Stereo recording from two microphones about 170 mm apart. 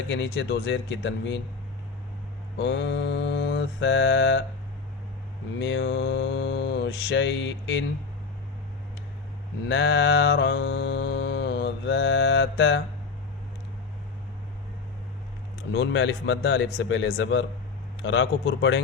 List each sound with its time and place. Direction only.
0.1 s mantra: 90° left
2.6 s mantra: 90° left
5.5 s mantra: 85° left
9.6 s mantra: 90° left
15.7 s mantra: 90° left